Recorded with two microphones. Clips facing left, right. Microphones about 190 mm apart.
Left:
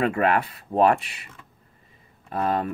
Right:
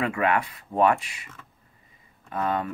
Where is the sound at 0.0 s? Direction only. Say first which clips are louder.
Left 3 dB; 35° left (ahead or behind).